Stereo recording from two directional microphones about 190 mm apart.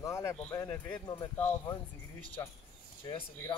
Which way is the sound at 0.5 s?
10° left (ahead or behind).